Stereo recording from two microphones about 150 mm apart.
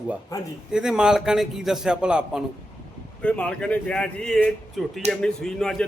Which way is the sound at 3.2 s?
10° left (ahead or behind).